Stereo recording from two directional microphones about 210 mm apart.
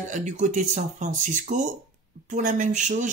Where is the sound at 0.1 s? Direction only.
35° right (ahead or behind).